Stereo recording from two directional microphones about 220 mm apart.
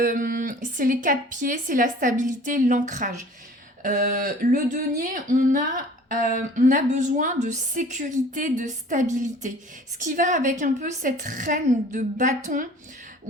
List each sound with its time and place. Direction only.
0.0 s speech: 40° right (ahead or behind)